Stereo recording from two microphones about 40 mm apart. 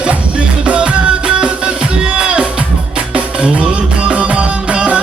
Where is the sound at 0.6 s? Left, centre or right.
Right.